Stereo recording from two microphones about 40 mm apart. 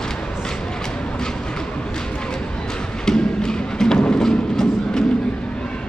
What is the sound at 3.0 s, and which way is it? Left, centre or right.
Music, centre.